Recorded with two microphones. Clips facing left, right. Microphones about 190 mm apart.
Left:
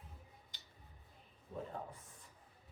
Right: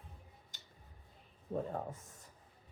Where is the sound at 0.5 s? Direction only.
45° right (ahead or behind).